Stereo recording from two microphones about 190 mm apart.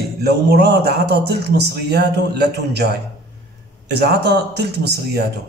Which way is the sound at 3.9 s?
60° right (ahead or behind).